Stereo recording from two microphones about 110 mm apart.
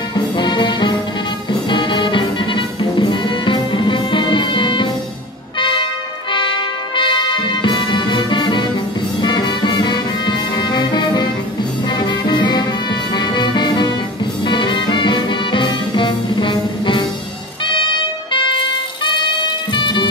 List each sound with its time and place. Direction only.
0.1 s music: 45° left (ahead or behind)
18.3 s music: 50° left (ahead or behind)
19.7 s music: 45° left (ahead or behind)